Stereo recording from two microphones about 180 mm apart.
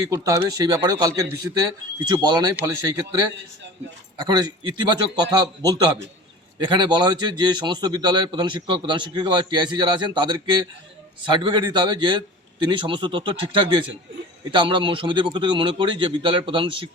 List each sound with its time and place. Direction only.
0.0 s a man's voice: 20° right (ahead or behind)